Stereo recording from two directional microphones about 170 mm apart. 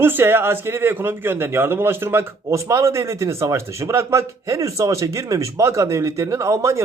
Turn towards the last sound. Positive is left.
turn(degrees=-15)  # may be behind; listen again after turning